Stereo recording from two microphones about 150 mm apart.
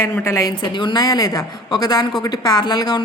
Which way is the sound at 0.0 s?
20° left (ahead or behind).